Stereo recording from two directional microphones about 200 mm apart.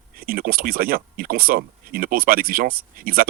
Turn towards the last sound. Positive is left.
turn(degrees=-45)  # may be behind; listen again after turning